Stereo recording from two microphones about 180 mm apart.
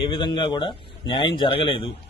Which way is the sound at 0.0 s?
25° left (ahead or behind).